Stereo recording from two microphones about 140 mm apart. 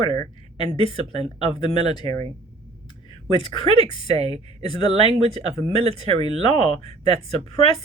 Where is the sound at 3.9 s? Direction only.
30° left (ahead or behind).